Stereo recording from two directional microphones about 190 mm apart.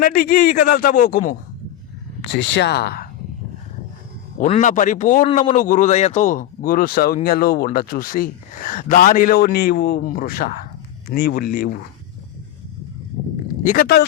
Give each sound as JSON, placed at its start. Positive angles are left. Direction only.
{"t": 0.0, "sound": "a man's voice", "side_deg": 50}
{"t": 2.2, "sound": "speech", "side_deg": 70}
{"t": 4.4, "sound": "a man's voice", "side_deg": 40}
{"t": 13.7, "sound": "a man's voice", "side_deg": 50}